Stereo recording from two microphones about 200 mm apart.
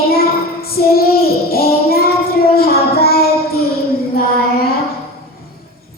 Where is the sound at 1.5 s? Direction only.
50° left (ahead or behind).